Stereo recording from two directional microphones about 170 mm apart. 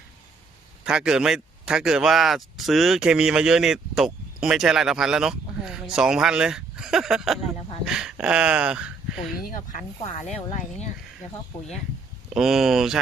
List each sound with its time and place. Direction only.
0.9 s speech: 5° right (ahead or behind)
9.4 s speech: 55° left (ahead or behind)
12.3 s speech: centre (ahead or behind)